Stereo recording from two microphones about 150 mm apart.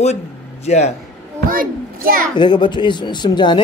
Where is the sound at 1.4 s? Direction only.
70° right (ahead or behind).